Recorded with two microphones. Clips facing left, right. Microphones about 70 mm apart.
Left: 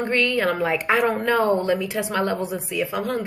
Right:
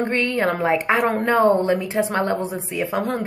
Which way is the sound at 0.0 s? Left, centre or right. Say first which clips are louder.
Right 1 dB; right.